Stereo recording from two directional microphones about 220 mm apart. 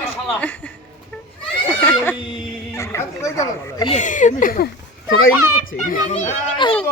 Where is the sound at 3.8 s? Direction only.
35° left (ahead or behind); by 5.9 s 50° left (ahead or behind).